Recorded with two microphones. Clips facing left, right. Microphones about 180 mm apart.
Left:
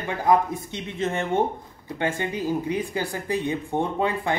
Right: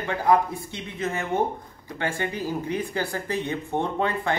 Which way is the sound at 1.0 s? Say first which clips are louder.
Left 2 dB; 25° left (ahead or behind).